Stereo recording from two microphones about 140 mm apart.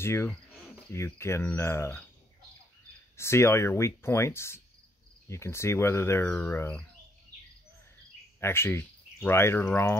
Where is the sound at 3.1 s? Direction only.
20° left (ahead or behind).